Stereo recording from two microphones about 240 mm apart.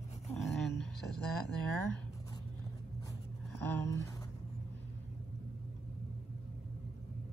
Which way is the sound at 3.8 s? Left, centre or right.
Centre.